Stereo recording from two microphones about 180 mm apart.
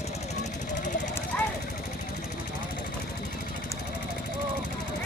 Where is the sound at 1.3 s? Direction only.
5° left (ahead or behind).